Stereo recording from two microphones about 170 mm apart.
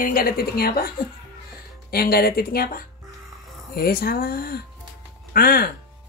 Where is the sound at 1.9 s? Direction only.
65° left (ahead or behind).